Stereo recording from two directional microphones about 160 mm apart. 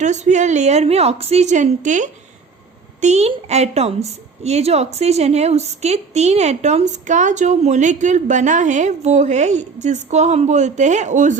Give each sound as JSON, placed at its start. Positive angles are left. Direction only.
{"t": 0.0, "sound": "a woman's voice", "side_deg": -50}